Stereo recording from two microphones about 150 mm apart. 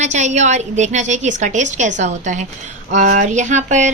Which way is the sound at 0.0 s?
50° right (ahead or behind).